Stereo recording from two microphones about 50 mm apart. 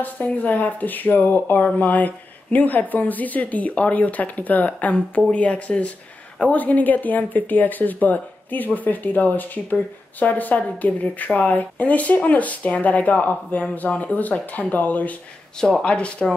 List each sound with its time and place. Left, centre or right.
0.0 s speech: left